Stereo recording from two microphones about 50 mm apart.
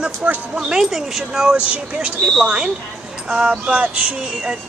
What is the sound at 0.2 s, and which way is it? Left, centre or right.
Speech, right.